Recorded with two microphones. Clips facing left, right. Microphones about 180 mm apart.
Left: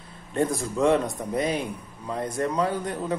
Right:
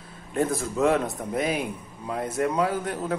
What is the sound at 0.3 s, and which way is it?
A man's voice, 5° right (ahead or behind).